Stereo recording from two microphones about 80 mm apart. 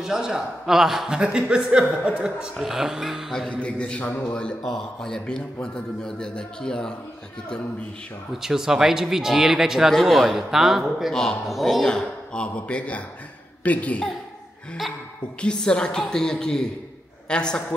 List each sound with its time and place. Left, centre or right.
0.0 s a man's voice: centre
8.3 s a man's voice: centre
15.4 s a man's voice: centre